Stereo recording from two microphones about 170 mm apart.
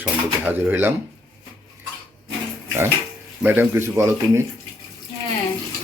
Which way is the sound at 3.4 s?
10° right (ahead or behind).